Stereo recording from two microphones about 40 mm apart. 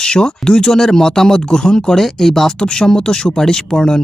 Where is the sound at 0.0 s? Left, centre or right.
Centre.